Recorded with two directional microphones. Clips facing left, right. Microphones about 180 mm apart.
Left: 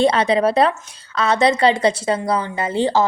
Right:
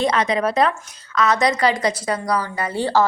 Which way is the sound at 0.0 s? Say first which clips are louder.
Left 4 dB; 30° left (ahead or behind).